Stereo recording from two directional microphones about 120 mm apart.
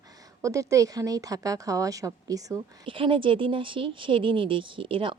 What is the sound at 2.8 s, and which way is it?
Speech, 45° right (ahead or behind).